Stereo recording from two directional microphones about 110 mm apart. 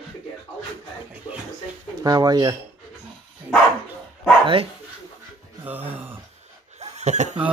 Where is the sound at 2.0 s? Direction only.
35° right (ahead or behind).